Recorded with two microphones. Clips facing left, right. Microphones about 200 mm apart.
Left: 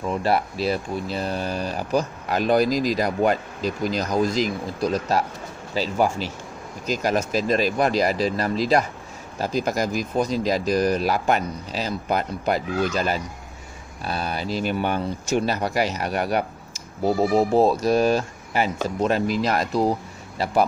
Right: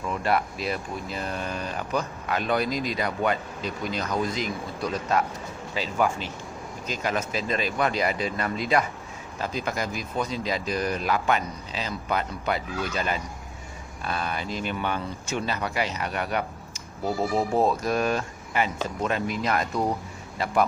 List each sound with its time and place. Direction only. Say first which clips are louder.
0.0 s speech: left 3 dB; 30° left (ahead or behind)